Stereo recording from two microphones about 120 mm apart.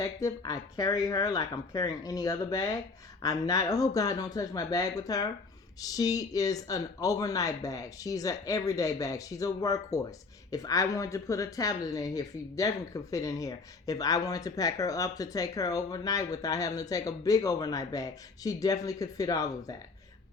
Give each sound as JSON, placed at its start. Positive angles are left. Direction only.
{"t": 0.0, "sound": "speech", "side_deg": 30}